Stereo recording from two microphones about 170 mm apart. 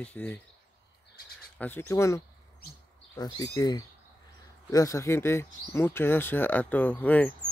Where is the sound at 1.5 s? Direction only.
10° left (ahead or behind).